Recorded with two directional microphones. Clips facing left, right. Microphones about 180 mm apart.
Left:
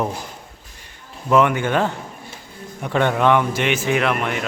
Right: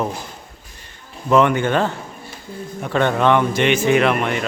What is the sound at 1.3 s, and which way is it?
A man's voice, 10° left (ahead or behind).